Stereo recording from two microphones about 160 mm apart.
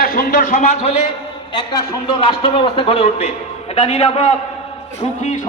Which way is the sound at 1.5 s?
25° left (ahead or behind).